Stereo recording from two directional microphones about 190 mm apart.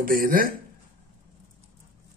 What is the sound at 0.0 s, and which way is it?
Speech, 50° right (ahead or behind).